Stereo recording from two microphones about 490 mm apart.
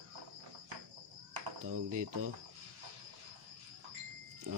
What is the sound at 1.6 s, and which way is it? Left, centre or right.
Speech, right.